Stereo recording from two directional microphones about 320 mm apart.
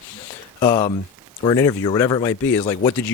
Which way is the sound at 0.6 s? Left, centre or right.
Centre.